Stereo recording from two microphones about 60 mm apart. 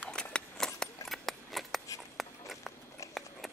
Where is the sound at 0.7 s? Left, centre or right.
Centre.